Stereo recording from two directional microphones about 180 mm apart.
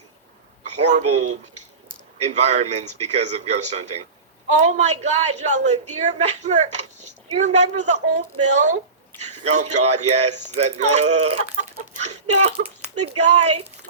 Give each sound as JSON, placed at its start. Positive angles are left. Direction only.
{"t": 0.8, "sound": "a woman's voice", "side_deg": -40}